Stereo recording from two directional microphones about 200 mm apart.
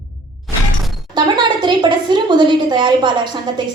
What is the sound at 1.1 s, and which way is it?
A woman's voice, 25° right (ahead or behind).